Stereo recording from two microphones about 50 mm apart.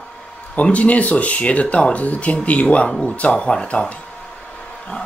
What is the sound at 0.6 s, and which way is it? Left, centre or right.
Speech, left.